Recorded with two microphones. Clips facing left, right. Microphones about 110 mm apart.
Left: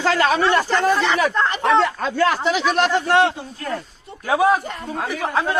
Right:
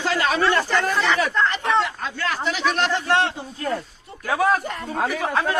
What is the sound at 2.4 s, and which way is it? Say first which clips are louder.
Speech: left 4 dB; 5° left (ahead or behind).